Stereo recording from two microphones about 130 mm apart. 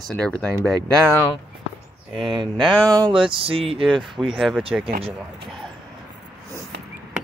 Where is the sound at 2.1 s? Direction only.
40° right (ahead or behind).